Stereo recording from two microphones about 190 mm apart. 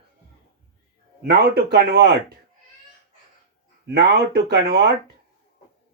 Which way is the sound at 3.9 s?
60° right (ahead or behind).